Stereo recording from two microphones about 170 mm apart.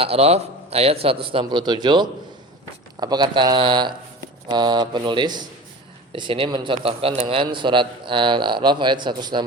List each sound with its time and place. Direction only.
0.0 s a man's voice: 35° right (ahead or behind)